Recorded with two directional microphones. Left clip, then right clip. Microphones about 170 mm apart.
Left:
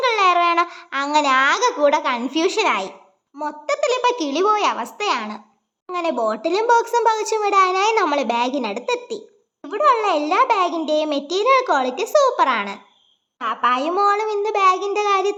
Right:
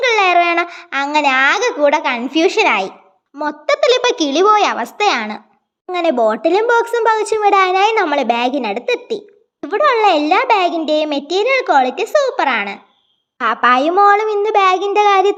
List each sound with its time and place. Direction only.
0.0 s a child's voice: 15° right (ahead or behind)
13.4 s a woman's voice: 30° right (ahead or behind)